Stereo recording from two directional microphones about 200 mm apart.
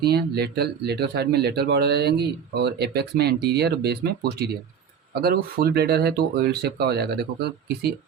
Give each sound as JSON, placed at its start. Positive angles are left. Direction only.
{"t": 0.0, "sound": "speech", "side_deg": -55}